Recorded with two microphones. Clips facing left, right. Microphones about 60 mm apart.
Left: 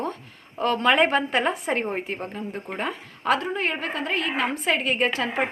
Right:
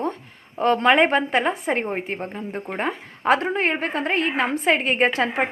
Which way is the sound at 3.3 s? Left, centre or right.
Right.